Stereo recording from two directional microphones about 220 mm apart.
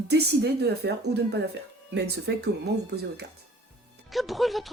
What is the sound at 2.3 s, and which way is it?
Speech, 55° right (ahead or behind).